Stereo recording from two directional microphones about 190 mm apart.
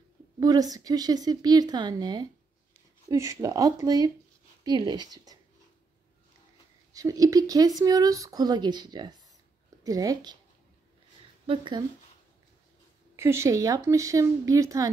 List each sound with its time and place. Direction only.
0.4 s speech: 20° right (ahead or behind)
6.9 s speech: 20° right (ahead or behind)
11.4 s speech: 25° right (ahead or behind)
13.1 s speech: 15° right (ahead or behind)